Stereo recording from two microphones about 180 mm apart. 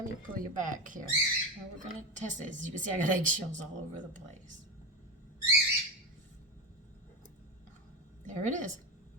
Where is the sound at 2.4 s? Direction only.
45° right (ahead or behind).